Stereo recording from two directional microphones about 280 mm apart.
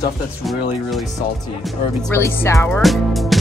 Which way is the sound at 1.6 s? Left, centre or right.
Centre.